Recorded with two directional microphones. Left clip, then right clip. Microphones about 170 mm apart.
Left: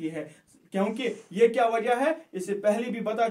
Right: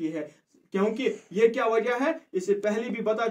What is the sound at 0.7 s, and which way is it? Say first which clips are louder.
Speech: right 2 dB; 20° left (ahead or behind).